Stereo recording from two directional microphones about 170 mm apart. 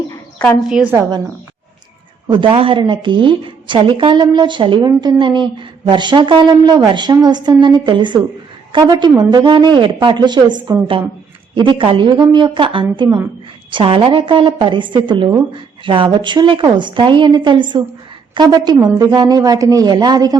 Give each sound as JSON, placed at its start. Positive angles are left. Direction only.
{"t": 0.1, "sound": "a sound", "side_deg": 20}
{"t": 0.7, "sound": "a woman's voice", "side_deg": -10}
{"t": 2.2, "sound": "a woman's voice", "side_deg": -30}